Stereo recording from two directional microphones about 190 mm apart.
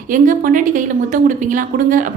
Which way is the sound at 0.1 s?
45° right (ahead or behind).